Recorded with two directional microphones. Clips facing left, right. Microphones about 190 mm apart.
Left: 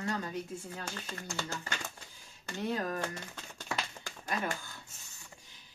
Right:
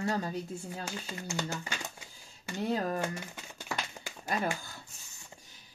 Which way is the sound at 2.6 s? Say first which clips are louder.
Right 3 dB; 30° right (ahead or behind).